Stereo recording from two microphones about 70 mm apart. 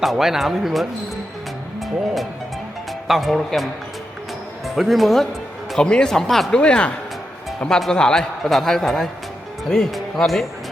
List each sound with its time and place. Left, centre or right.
0.0 s a man's voice: centre
3.1 s a man's voice: centre
6.6 s a man's voice: centre